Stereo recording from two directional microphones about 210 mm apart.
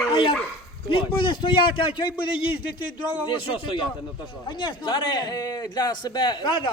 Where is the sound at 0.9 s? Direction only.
25° left (ahead or behind).